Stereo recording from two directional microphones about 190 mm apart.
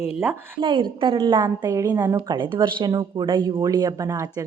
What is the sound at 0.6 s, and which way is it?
A woman's voice, 25° right (ahead or behind).